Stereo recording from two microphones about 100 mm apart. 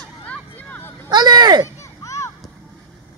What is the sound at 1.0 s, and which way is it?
Speech, 45° right (ahead or behind).